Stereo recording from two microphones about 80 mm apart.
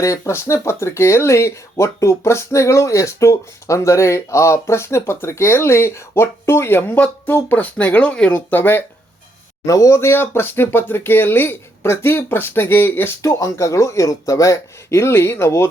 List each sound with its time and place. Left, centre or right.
0.0 s speech: left
9.6 s speech: left
13.2 s speech: left